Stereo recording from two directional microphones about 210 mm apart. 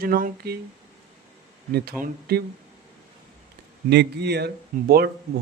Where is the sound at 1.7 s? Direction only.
45° right (ahead or behind).